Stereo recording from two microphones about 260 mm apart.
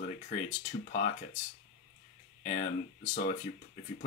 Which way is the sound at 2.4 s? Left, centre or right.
Left.